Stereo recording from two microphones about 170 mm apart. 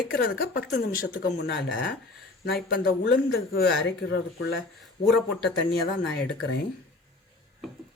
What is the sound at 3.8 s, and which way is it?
Speech, 90° left.